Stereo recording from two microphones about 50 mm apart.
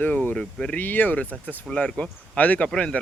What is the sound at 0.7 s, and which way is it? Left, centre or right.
Speech, left.